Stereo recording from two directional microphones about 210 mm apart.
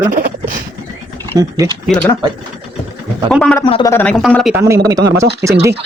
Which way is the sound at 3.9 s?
5° left (ahead or behind).